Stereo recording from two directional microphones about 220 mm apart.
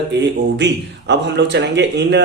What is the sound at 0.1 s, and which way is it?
A man's voice, 50° right (ahead or behind).